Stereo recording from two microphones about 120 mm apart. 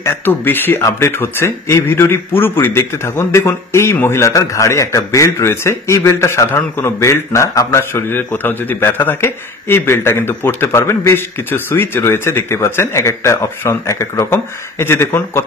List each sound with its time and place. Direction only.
0.0 s speech: 20° left (ahead or behind)